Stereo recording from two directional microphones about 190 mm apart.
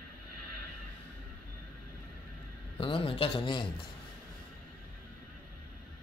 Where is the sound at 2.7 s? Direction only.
30° left (ahead or behind).